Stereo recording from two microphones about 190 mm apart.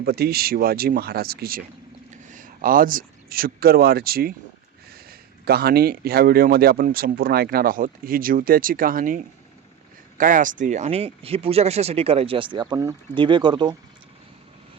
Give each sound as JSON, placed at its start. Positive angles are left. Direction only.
{"t": 0.0, "sound": "speech", "side_deg": -55}
{"t": 2.0, "sound": "speech", "side_deg": -40}